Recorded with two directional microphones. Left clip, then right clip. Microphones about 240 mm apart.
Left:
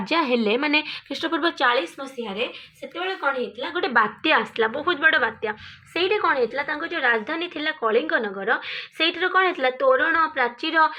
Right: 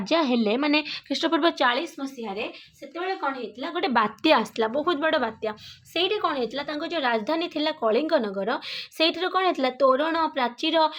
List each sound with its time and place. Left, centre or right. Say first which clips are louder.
0.1 s a woman's voice: left 2 dB; centre; by 10.9 s right